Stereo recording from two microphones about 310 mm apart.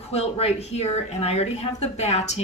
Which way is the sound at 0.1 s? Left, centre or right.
Centre.